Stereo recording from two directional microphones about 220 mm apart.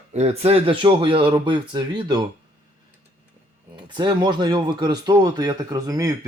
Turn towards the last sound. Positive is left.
turn(degrees=-15)  # may be behind; listen again after turning